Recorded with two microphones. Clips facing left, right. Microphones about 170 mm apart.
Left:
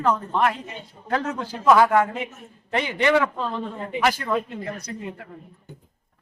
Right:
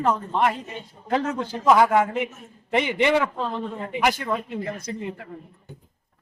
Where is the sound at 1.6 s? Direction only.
20° right (ahead or behind).